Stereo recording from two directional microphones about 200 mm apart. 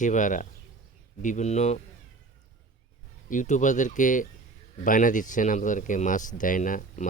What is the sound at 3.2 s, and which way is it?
Speech, 40° left (ahead or behind).